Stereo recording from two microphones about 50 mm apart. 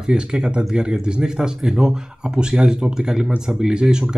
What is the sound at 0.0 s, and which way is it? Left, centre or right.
Speech, centre.